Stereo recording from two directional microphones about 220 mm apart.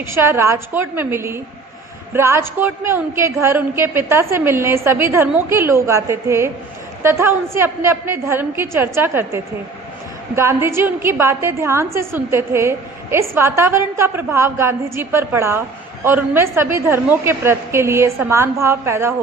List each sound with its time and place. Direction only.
0.0 s a woman's voice: 10° right (ahead or behind)